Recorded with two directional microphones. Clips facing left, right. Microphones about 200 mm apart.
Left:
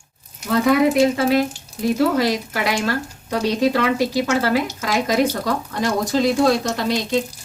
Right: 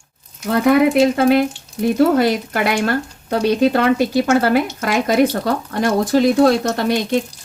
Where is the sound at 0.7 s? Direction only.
55° right (ahead or behind).